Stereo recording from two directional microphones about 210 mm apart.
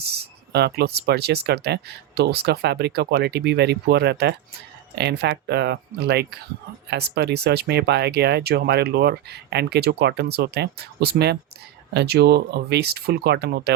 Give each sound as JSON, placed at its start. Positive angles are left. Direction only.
{"t": 0.0, "sound": "speech", "side_deg": -50}